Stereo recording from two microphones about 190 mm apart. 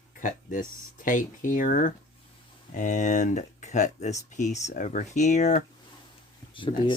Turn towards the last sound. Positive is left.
turn(degrees=25)  # may be behind; listen again after turning